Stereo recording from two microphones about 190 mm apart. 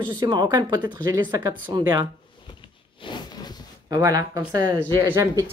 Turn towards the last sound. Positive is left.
turn(degrees=-15)  # may be behind; listen again after turning